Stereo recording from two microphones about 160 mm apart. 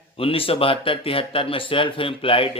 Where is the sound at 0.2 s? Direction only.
35° left (ahead or behind).